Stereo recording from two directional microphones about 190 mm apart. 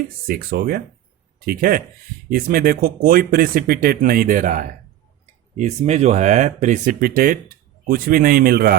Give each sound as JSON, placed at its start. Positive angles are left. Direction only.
{"t": 0.3, "sound": "speech", "side_deg": -50}